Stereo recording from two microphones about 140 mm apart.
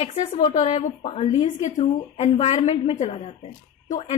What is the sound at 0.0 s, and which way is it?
A woman's voice, 50° left (ahead or behind).